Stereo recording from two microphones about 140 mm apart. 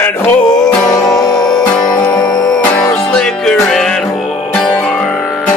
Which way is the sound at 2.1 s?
10° left (ahead or behind).